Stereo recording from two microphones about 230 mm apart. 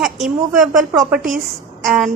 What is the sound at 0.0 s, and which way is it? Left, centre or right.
A woman's voice, centre.